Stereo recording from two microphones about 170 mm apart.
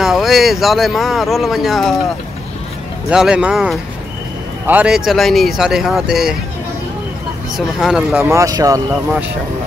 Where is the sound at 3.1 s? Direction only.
5° right (ahead or behind).